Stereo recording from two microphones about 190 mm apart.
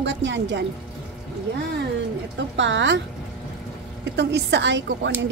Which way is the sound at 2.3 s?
70° right (ahead or behind).